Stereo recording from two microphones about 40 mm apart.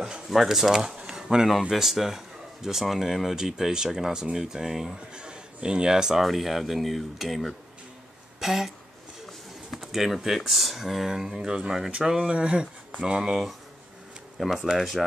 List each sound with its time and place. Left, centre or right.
0.3 s speech: centre
5.1 s speech: right
6.2 s speech: centre
9.8 s speech: centre
12.3 s speech: right
14.4 s speech: centre